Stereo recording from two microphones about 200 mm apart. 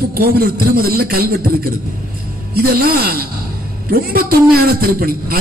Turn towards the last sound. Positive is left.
turn(degrees=-50)  # may be behind; listen again after turning